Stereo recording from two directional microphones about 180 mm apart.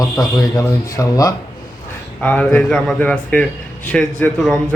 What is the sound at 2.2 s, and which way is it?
A man's voice, 10° left (ahead or behind).